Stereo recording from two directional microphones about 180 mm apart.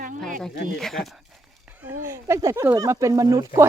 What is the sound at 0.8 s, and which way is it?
Speech, centre (ahead or behind).